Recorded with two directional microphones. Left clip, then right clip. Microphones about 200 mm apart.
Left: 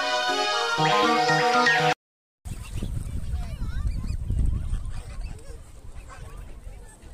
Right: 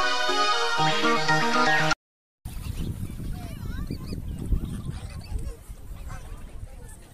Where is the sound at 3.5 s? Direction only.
40° left (ahead or behind).